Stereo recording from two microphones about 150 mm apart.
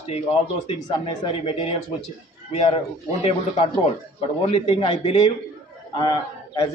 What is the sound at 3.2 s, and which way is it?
A man's voice, 40° left (ahead or behind).